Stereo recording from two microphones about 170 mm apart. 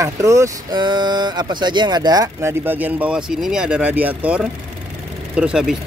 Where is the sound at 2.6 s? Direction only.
10° right (ahead or behind).